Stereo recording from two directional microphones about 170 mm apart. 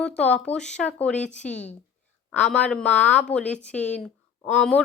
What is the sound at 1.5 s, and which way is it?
Speech, 40° left (ahead or behind).